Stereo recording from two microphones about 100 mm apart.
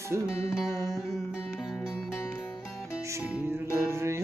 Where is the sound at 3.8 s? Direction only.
25° right (ahead or behind).